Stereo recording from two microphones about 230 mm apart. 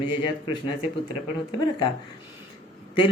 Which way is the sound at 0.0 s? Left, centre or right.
Centre.